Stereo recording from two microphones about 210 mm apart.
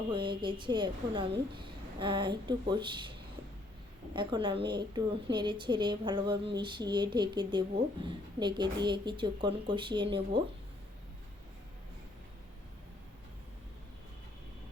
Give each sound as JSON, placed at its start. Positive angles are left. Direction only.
{"t": 0.1, "sound": "a woman's voice", "side_deg": -20}
{"t": 4.1, "sound": "a woman's voice", "side_deg": -20}